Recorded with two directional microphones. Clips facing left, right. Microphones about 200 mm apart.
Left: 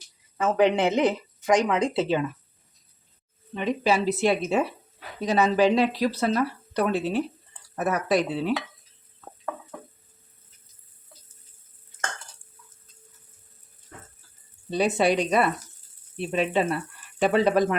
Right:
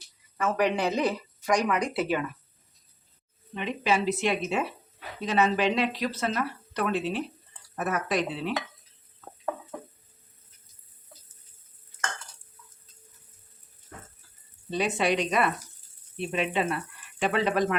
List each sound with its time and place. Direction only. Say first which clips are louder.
0.3 s speech: left 5 dB; 25° left (ahead or behind)
3.5 s speech: left 3 dB; 40° left (ahead or behind)
14.7 s speech: left 4 dB; 35° left (ahead or behind)